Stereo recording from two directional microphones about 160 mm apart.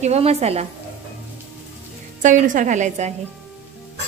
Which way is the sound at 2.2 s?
55° right (ahead or behind).